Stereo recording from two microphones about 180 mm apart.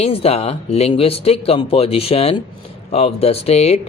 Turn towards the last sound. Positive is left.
turn(degrees=35)  # may be behind; listen again after turning